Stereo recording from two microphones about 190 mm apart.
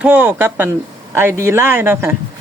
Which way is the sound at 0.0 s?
10° right (ahead or behind).